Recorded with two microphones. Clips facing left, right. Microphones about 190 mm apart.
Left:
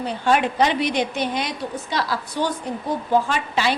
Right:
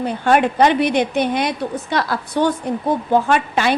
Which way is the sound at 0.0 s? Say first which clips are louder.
Right 4 dB; 55° right (ahead or behind).